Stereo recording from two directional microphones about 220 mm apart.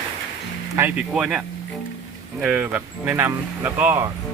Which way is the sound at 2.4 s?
5° right (ahead or behind).